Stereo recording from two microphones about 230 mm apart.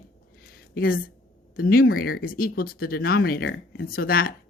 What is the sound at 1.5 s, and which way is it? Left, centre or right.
A woman's voice, left.